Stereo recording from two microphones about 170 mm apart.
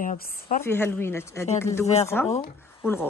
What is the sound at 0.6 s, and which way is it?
Speech, 15° left (ahead or behind).